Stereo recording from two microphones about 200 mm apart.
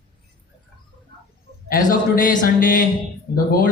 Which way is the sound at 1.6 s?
45° left (ahead or behind).